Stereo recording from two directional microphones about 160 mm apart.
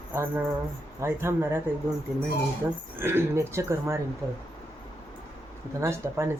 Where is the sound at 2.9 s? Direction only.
15° right (ahead or behind).